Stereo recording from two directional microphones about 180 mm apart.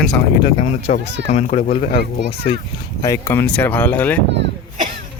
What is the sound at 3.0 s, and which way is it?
Speech, 15° left (ahead or behind).